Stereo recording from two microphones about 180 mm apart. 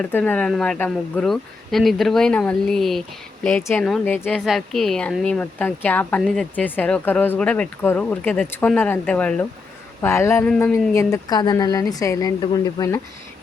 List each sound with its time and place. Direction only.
0.0 s speech: 10° left (ahead or behind)
3.6 s a woman's voice: 15° left (ahead or behind)